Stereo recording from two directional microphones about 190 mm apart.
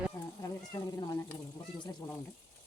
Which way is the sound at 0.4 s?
20° left (ahead or behind).